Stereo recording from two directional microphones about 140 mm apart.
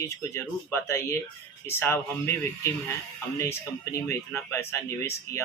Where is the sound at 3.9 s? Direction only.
20° left (ahead or behind).